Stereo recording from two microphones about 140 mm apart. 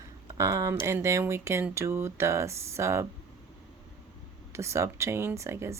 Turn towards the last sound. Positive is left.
turn(degrees=-20)  # may be behind; listen again after turning